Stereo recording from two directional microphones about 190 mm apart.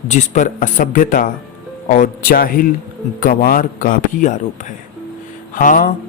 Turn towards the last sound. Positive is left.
turn(degrees=45)  # may be behind; listen again after turning